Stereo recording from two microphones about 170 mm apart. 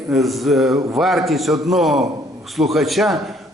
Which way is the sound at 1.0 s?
Centre (ahead or behind).